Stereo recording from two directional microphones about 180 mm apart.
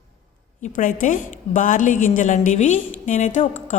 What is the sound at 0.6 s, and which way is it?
Speech, 50° left (ahead or behind).